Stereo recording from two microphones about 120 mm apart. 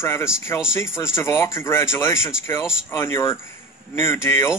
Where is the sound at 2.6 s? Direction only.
5° right (ahead or behind).